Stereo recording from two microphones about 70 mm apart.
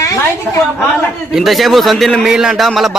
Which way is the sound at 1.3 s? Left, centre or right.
Centre.